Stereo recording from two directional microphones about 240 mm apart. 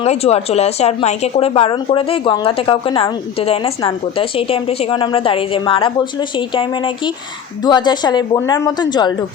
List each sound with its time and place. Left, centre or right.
0.0 s a woman's voice: left